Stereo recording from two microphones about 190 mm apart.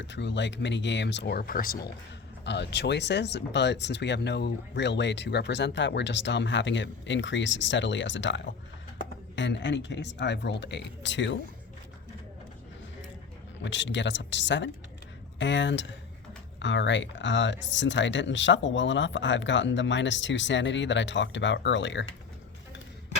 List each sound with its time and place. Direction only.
0.0 s speech: 65° left (ahead or behind); by 1.9 s 50° left (ahead or behind)
2.4 s speech: 65° left (ahead or behind)
13.6 s speech: 70° left (ahead or behind)